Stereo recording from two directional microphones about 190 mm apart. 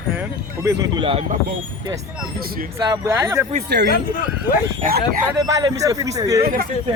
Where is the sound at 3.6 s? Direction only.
60° right (ahead or behind).